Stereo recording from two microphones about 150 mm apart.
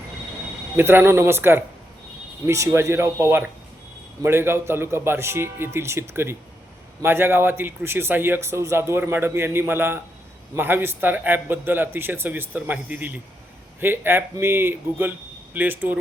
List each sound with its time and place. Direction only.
0.8 s a man's voice: 15° right (ahead or behind)